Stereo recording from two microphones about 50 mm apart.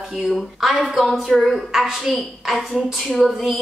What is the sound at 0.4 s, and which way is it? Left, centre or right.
A woman's voice, centre.